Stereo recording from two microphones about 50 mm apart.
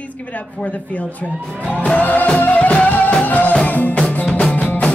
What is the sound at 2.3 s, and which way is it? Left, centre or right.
Music, left.